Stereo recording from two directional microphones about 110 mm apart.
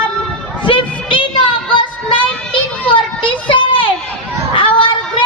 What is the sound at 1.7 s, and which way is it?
Child singing, 50° left (ahead or behind).